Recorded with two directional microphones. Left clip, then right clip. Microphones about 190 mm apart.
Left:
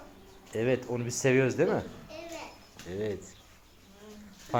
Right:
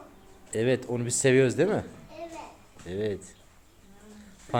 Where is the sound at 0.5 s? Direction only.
40° right (ahead or behind).